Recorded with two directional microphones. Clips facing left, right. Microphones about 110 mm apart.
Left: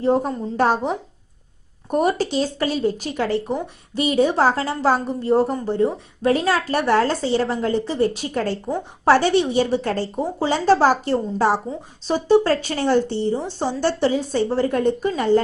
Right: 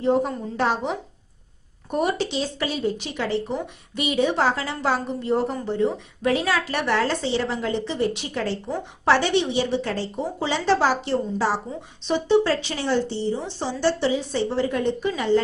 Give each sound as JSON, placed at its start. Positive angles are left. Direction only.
{"t": 0.0, "sound": "speech", "side_deg": 40}
{"t": 12.0, "sound": "speech", "side_deg": 40}